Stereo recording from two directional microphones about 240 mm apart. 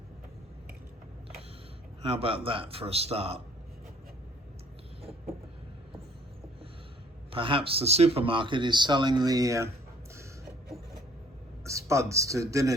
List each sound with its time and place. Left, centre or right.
2.0 s speech: right
7.3 s speech: right
11.9 s speech: centre